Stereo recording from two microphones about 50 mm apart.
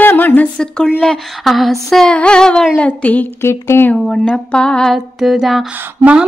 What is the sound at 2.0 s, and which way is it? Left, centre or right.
Speech, centre.